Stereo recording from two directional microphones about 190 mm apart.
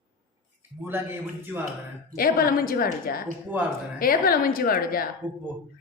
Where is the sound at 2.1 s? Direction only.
50° left (ahead or behind).